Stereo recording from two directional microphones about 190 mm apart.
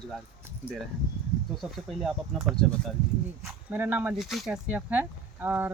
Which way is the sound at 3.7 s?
10° right (ahead or behind).